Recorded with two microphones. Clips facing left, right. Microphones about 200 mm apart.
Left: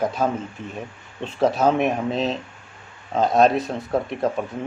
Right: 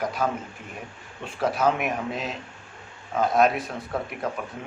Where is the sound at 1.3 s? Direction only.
25° left (ahead or behind).